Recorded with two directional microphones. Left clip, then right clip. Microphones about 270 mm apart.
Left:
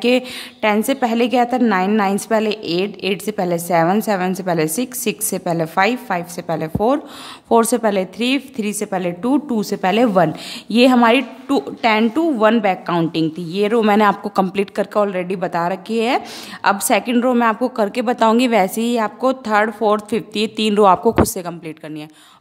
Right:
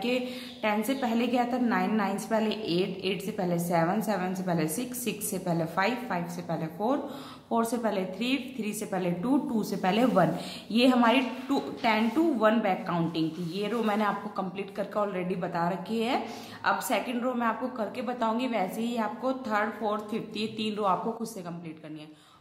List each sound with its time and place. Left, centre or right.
0.0 s a woman's voice: left